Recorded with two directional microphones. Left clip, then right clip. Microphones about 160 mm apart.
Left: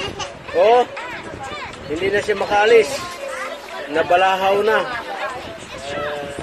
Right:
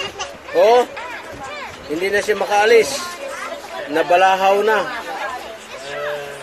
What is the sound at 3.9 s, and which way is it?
Speech, 15° right (ahead or behind).